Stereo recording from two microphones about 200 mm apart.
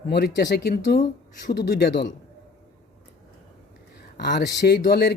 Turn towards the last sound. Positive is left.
turn(degrees=50)  # may be behind; listen again after turning